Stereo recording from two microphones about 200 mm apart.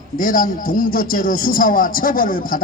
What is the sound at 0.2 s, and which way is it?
A man's voice, 45° left (ahead or behind).